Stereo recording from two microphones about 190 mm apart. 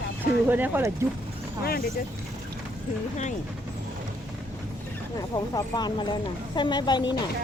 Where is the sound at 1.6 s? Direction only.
55° left (ahead or behind).